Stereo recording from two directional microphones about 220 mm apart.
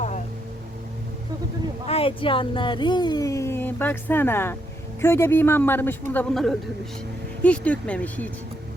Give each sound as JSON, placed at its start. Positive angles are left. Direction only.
{"t": 1.9, "sound": "a woman's voice", "side_deg": 25}